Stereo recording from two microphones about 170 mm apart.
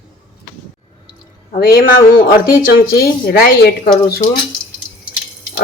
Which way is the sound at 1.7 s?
60° left (ahead or behind).